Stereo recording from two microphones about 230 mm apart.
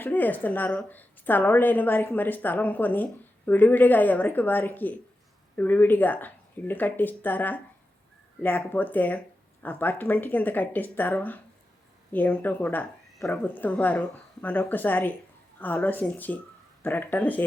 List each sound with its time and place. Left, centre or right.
0.0 s a woman's voice: centre